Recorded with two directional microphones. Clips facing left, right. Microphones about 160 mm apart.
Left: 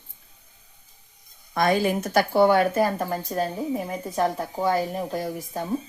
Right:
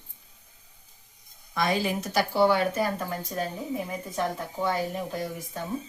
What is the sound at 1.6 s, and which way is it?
Speech, 50° left (ahead or behind).